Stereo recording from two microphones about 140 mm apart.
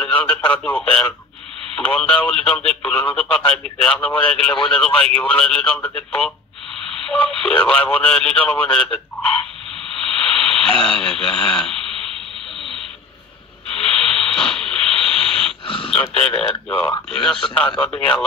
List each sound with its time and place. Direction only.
0.0 s radio: 10° left (ahead or behind)
0.5 s speech: 10° left (ahead or behind)
9.9 s a sound: 5° left (ahead or behind)
10.8 s speech: 5° left (ahead or behind)
13.7 s radio: 5° left (ahead or behind)
15.6 s a sound: 40° left (ahead or behind)
16.2 s speech: 5° left (ahead or behind)